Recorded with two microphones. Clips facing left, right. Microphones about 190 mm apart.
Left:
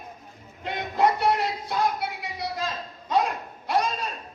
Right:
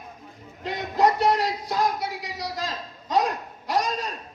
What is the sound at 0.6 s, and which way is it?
Music, 55° left (ahead or behind).